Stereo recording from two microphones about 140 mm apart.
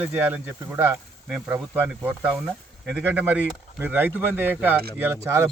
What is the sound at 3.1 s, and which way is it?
Speech, 10° right (ahead or behind).